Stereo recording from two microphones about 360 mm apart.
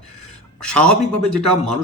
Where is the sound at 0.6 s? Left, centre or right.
Centre.